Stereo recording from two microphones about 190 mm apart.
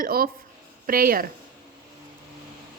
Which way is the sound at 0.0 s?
50° right (ahead or behind).